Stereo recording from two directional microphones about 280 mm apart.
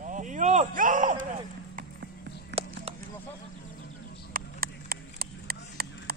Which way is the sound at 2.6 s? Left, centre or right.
Right.